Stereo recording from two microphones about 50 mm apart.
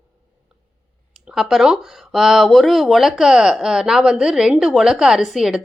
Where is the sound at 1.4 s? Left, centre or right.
Centre.